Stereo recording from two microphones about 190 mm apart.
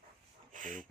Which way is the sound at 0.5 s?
45° right (ahead or behind).